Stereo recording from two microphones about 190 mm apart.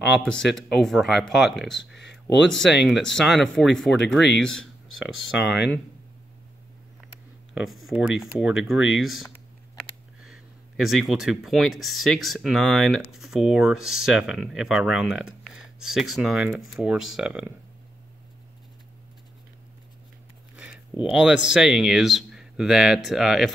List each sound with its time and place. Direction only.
0.0 s speech: centre (ahead or behind)
2.0 s speech: 60° left (ahead or behind)
2.9 s speech: 5° left (ahead or behind)
5.2 s speech: 65° left (ahead or behind)
7.5 s speech: centre (ahead or behind)
20.5 s speech: 5° right (ahead or behind)